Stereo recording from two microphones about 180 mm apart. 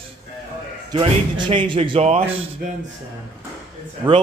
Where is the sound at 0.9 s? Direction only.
30° right (ahead or behind).